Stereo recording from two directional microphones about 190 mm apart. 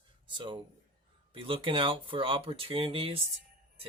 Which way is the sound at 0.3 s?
25° right (ahead or behind).